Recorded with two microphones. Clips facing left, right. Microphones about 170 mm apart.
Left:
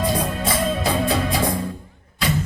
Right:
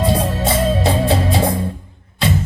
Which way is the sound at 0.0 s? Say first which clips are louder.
Right 4 dB; 30° right (ahead or behind).